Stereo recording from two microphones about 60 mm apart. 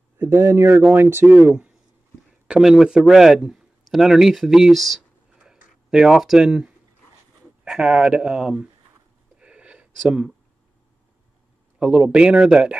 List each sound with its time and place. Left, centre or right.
0.2 s a man's voice: right
1.2 s speech: right
2.6 s speech: centre
9.4 s a sound: centre
11.8 s speech: centre